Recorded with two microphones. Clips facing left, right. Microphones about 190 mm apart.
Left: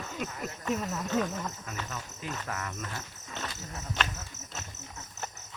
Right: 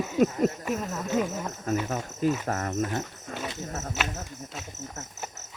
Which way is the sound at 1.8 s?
45° right (ahead or behind).